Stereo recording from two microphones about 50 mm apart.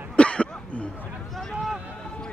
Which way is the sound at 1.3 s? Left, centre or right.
Centre.